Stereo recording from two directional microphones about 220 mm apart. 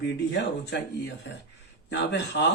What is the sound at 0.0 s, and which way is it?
Speech, 50° left (ahead or behind).